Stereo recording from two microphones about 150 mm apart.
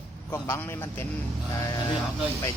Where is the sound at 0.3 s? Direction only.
15° left (ahead or behind).